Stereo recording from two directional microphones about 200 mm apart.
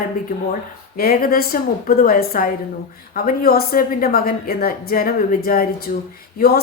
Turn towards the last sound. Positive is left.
turn(degrees=50)  # may be behind; listen again after turning